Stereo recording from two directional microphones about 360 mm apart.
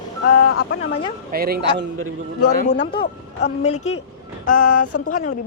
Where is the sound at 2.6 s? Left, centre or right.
Left.